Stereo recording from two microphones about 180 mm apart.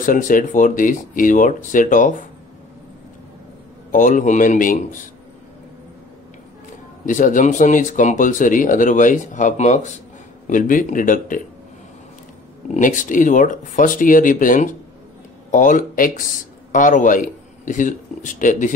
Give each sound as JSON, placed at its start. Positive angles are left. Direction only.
{"t": 0.0, "sound": "speech", "side_deg": 50}
{"t": 3.9, "sound": "speech", "side_deg": 45}
{"t": 7.1, "sound": "speech", "side_deg": 45}
{"t": 12.7, "sound": "speech", "side_deg": 45}